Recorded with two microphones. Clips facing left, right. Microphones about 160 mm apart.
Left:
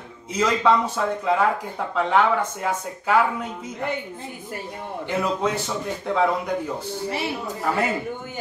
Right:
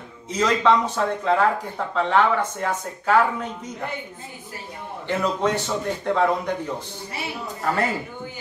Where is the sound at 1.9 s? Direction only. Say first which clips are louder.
Even; 10° left (ahead or behind).